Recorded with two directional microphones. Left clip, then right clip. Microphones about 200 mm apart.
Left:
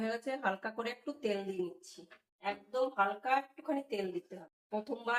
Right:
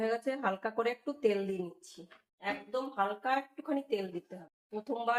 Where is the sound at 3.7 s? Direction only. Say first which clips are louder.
Right 5 dB; 30° right (ahead or behind).